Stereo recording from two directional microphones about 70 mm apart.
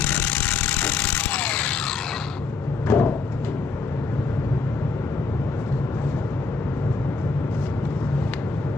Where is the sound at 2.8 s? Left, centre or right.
Left.